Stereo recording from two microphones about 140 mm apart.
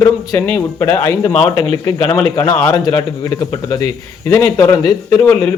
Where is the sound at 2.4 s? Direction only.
20° left (ahead or behind).